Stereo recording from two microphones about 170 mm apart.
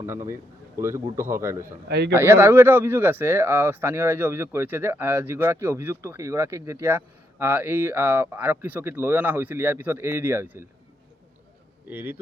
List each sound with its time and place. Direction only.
0.0 s speech: 15° right (ahead or behind)
11.9 s speech: 10° right (ahead or behind)